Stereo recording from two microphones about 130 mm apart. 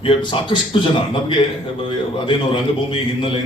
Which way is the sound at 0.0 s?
40° left (ahead or behind).